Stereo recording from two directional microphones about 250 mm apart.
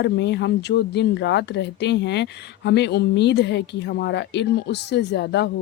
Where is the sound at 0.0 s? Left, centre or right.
Left.